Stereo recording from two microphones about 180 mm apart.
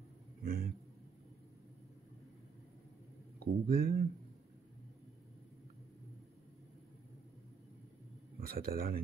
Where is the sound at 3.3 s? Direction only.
55° right (ahead or behind).